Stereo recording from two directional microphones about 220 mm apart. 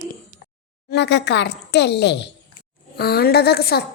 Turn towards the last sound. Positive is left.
turn(degrees=45)  # may be behind; listen again after turning